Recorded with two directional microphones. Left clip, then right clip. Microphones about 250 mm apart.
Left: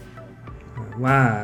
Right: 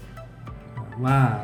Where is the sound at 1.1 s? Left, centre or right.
Left.